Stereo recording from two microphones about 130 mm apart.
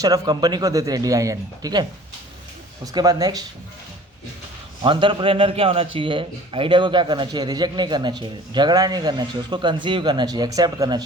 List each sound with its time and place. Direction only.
0.0 s speech: 30° right (ahead or behind)
4.8 s a man's voice: 40° right (ahead or behind)